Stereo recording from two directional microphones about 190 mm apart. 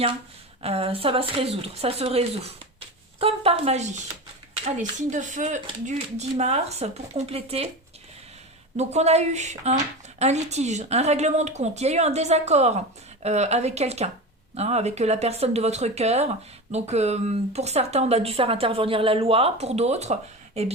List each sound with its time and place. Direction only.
0.6 s a woman's voice: 30° right (ahead or behind)
8.7 s a woman's voice: 35° right (ahead or behind)